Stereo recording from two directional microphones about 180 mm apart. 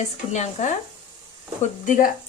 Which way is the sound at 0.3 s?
40° left (ahead or behind).